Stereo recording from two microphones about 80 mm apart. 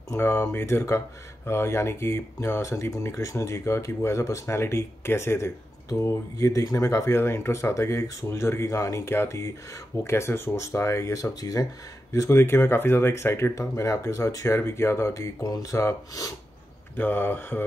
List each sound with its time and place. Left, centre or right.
0.1 s speech: left
12.1 s speech: left
15.4 s speech: left
16.9 s speech: left